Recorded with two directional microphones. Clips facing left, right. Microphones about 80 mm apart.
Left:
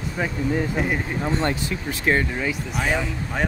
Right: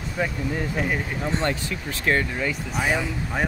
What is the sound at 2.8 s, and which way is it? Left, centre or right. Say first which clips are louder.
Speech: even; centre.